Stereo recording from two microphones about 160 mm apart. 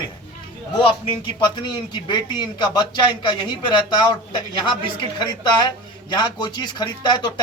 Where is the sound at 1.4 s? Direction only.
25° left (ahead or behind).